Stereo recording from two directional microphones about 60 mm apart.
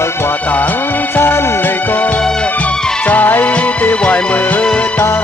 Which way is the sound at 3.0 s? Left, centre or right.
Left.